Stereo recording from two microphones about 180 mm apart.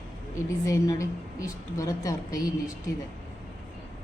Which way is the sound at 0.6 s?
15° left (ahead or behind).